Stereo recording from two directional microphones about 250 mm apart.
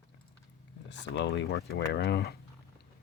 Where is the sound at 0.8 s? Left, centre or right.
Left.